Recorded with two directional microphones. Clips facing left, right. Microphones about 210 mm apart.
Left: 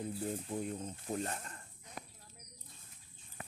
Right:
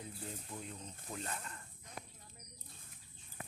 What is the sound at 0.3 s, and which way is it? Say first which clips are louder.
Speech: left 9 dB; 45° left (ahead or behind).